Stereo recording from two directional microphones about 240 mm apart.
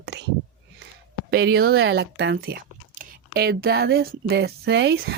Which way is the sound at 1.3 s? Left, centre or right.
Right.